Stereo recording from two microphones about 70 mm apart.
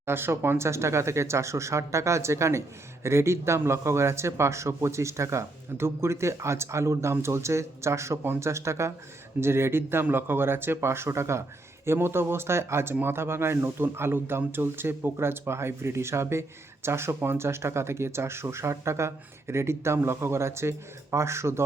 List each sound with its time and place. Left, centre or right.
0.0 s speech: right